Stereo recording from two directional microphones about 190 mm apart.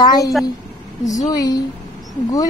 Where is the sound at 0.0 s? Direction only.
20° left (ahead or behind).